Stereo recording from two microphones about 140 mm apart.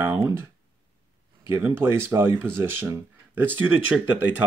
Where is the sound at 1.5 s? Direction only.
15° right (ahead or behind).